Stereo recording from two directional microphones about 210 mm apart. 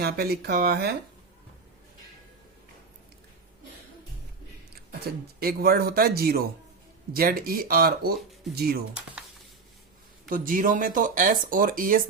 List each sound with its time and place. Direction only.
0.0 s speech: 50° right (ahead or behind)
5.4 s speech: 45° right (ahead or behind)
10.2 s speech: 40° right (ahead or behind)